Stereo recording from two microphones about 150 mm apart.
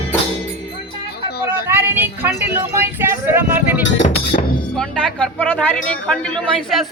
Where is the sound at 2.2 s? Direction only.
15° right (ahead or behind).